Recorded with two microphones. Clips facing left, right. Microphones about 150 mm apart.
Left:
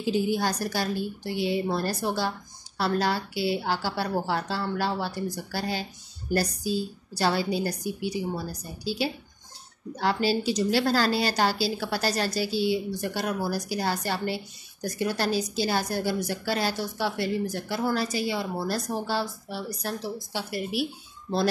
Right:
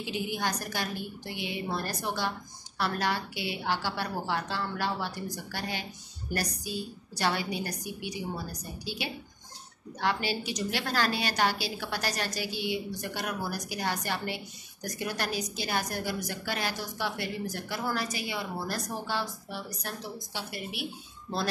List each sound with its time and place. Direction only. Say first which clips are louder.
0.0 s speech: left 7 dB; 35° left (ahead or behind)